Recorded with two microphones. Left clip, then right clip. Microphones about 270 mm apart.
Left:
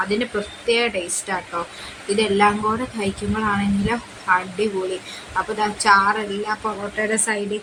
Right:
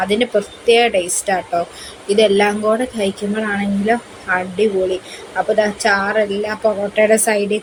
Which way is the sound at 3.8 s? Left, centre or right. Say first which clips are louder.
Right 3 dB; centre.